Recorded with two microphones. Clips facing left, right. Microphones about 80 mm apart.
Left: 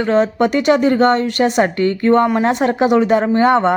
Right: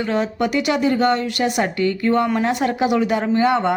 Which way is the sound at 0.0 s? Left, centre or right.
Left.